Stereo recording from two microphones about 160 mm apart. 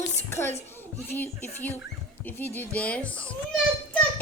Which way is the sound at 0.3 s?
15° left (ahead or behind).